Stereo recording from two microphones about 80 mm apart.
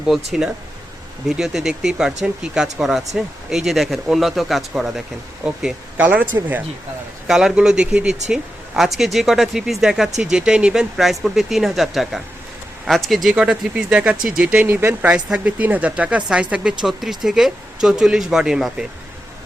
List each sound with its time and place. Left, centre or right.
0.1 s speech: centre
6.0 s speech: centre
7.3 s speech: centre
13.3 s speech: centre; by 15.1 s right
15.1 s speech: centre